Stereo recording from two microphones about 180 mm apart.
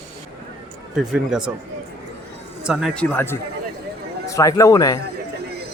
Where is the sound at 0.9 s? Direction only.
5° right (ahead or behind).